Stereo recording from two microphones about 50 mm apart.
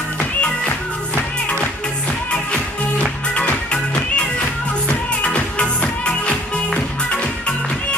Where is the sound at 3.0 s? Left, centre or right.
Left.